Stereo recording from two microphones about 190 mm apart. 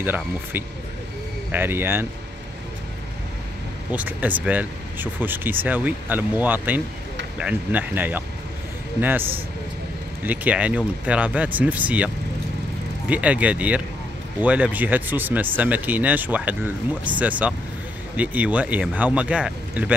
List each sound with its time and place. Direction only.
0.0 s speech: 10° right (ahead or behind)
3.9 s speech: 10° right (ahead or behind)
10.2 s speech: 10° right (ahead or behind)
13.1 s speech: 5° right (ahead or behind)